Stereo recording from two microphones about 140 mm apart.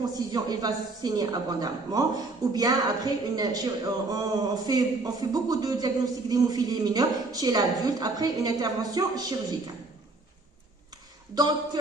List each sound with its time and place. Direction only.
0.3 s a woman's voice: 30° right (ahead or behind)
11.3 s a woman's voice: 30° right (ahead or behind)